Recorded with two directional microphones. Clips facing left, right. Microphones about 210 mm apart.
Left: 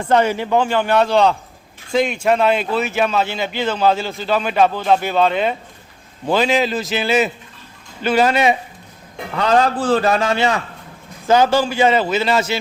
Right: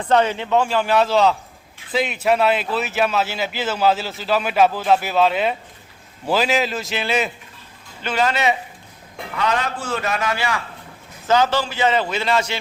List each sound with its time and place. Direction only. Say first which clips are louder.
0.1 s speech: left 2 dB; 10° left (ahead or behind)
8.0 s speech: left 5 dB; 10° left (ahead or behind)
9.3 s a man's voice: left 7 dB; 35° left (ahead or behind)
11.3 s speech: left 4 dB; 10° left (ahead or behind)